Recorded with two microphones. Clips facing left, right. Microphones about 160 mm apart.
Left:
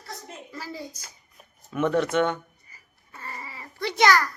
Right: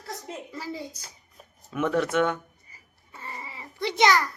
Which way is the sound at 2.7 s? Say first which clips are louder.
Left 1 dB; 25° right (ahead or behind).